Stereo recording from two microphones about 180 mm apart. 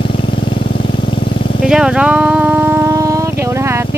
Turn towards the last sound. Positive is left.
turn(degrees=-15)  # may be behind; listen again after turning